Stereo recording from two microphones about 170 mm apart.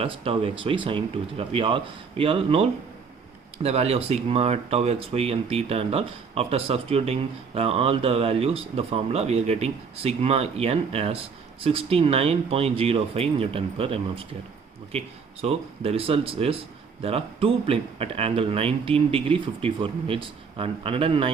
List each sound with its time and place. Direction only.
0.0 s speech: 35° right (ahead or behind)